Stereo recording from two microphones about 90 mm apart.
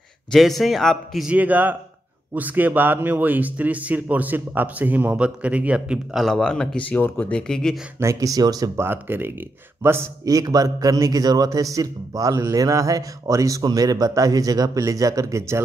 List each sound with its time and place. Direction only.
0.3 s a man's voice: centre (ahead or behind)
1.2 s speech: 15° right (ahead or behind)
6.1 s speech: 5° left (ahead or behind)
8.0 s a man's voice: 35° right (ahead or behind)
8.7 s speech: 25° right (ahead or behind)
10.2 s a man's voice: 40° right (ahead or behind)